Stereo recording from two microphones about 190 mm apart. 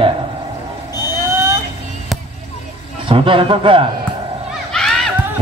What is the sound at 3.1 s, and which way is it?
Speech, 30° right (ahead or behind).